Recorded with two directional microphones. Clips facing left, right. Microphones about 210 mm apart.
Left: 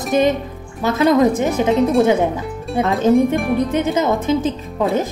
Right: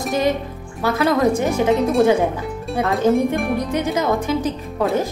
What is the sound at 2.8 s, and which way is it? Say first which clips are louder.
A woman's voice: left 3 dB; 20° left (ahead or behind).